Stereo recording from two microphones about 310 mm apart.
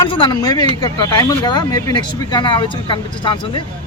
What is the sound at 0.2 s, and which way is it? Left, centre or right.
Speech, centre.